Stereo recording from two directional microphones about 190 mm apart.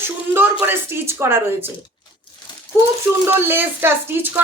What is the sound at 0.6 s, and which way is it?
Speech, 10° right (ahead or behind).